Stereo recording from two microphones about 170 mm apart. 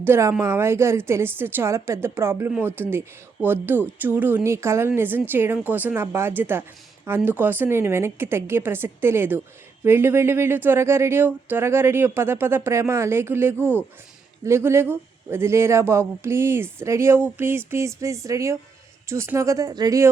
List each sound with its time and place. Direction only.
0.0 s speech: 15° right (ahead or behind)